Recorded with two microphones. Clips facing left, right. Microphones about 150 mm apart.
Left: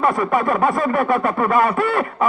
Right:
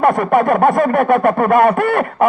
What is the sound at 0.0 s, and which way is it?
Speech, 55° right (ahead or behind).